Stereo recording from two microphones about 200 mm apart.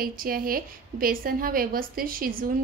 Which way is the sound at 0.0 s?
45° right (ahead or behind).